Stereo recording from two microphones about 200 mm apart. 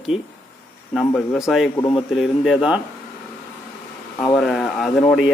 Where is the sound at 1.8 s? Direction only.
25° left (ahead or behind).